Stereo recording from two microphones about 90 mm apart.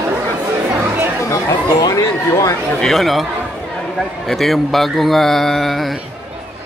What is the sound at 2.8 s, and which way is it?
A man's voice, centre (ahead or behind).